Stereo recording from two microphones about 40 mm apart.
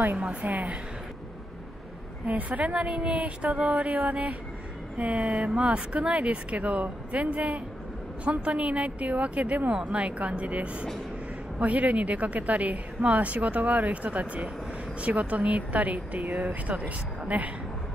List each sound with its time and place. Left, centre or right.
0.2 s a woman's voice: right
0.5 s a woman's voice: right
2.2 s a woman's voice: right